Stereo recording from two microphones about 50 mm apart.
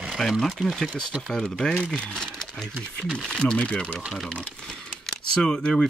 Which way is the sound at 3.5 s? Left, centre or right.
Left.